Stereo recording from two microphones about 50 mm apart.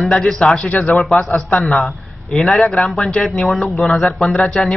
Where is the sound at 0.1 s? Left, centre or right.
Centre.